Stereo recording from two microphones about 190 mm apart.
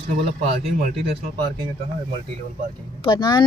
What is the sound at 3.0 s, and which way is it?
Speech, 25° left (ahead or behind).